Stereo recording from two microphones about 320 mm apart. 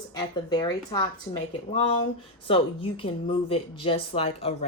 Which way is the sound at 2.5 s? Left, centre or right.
Centre.